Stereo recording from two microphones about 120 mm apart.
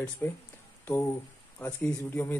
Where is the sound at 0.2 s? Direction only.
20° left (ahead or behind).